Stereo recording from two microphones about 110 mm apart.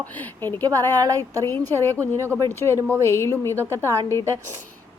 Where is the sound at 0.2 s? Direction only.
20° left (ahead or behind).